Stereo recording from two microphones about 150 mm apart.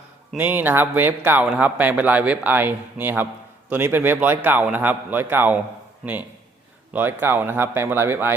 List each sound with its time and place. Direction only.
0.3 s a man's voice: 10° right (ahead or behind)
6.9 s a man's voice: 15° right (ahead or behind)